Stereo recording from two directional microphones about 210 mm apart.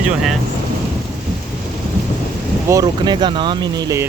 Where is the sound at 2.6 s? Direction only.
15° right (ahead or behind).